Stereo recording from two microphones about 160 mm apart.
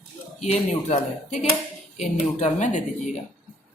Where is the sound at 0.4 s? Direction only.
45° left (ahead or behind).